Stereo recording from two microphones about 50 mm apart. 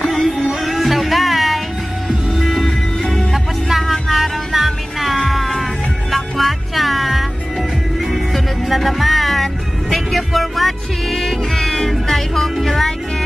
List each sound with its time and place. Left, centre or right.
0.0 s music: centre
3.6 s music: centre